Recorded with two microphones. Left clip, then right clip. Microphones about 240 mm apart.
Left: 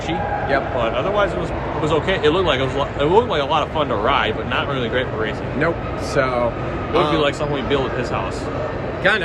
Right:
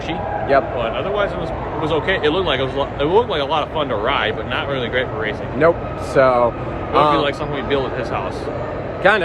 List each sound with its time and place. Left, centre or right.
0.8 s speech: centre
5.6 s a man's voice: centre
7.2 s speech: centre
9.0 s a man's voice: centre